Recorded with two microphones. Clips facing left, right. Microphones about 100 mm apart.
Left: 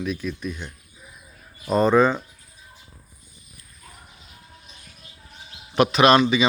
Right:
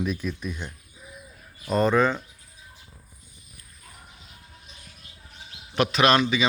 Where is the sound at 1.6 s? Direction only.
10° left (ahead or behind).